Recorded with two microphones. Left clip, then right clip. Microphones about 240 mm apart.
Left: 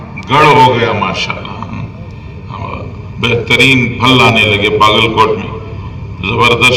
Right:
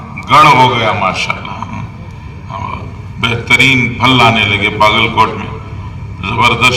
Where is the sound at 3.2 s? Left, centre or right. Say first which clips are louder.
Even; right.